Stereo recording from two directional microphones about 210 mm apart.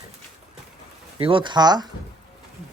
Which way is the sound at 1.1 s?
25° right (ahead or behind).